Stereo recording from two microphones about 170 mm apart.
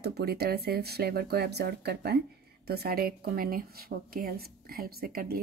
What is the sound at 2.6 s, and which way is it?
Speech, 65° right (ahead or behind).